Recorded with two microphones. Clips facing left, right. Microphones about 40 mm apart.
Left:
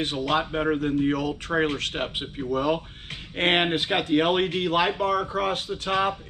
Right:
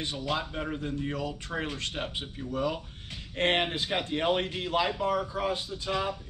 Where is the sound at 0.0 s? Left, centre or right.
Left.